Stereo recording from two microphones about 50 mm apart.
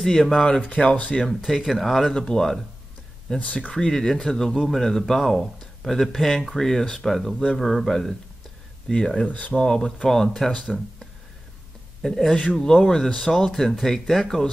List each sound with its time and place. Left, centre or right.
0.0 s speech: centre
0.7 s speech: left
1.2 s a man's voice: centre
3.3 s speech: left
3.7 s a man's voice: centre
8.9 s speech: centre
12.0 s speech: centre